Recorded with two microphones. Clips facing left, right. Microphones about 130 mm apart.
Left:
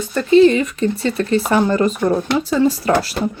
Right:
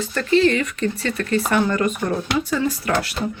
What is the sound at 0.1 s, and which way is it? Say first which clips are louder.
Speech: left 7 dB; 15° left (ahead or behind).